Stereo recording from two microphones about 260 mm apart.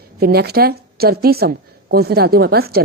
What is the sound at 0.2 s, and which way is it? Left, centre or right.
A woman's voice, right.